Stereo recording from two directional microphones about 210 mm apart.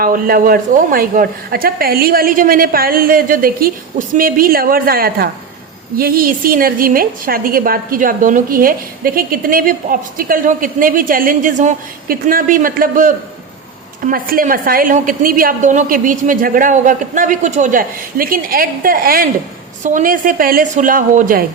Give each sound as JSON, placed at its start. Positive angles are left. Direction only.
{"t": 0.0, "sound": "a woman's voice", "side_deg": -45}